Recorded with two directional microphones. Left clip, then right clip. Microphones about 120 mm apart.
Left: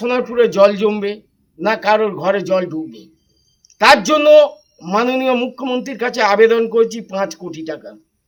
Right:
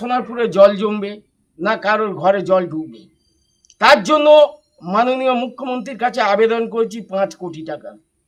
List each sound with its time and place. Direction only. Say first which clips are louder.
0.0 s a man's voice: left 4 dB; 15° right (ahead or behind)